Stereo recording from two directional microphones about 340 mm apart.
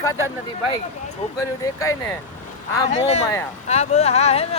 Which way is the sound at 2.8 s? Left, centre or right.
Centre.